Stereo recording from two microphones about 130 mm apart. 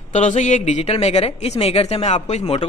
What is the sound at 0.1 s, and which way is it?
A man's voice, 70° left (ahead or behind).